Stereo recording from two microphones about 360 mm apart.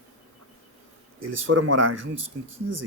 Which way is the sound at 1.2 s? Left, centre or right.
Right.